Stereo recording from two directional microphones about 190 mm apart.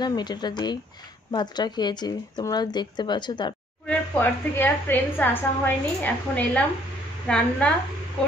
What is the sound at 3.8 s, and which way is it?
A woman's voice, 10° left (ahead or behind).